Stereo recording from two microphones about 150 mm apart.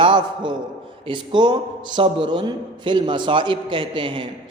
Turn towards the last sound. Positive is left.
turn(degrees=-35)  # may be behind; listen again after turning